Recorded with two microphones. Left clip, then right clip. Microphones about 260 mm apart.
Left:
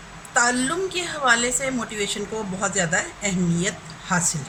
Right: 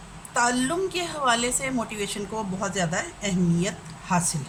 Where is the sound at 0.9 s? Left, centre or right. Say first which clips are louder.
Left 2 dB; right.